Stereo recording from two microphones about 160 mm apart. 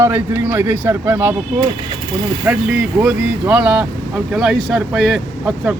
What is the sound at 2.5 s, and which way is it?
Speech, 10° right (ahead or behind).